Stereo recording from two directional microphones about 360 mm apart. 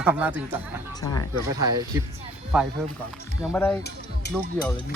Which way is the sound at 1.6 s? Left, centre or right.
Centre.